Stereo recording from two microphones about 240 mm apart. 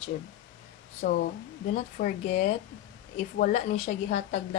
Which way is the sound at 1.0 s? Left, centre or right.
Left.